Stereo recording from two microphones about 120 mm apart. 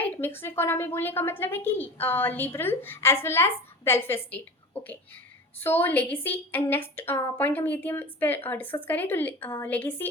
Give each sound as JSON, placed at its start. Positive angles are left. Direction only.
{"t": 0.0, "sound": "a woman's voice", "side_deg": 20}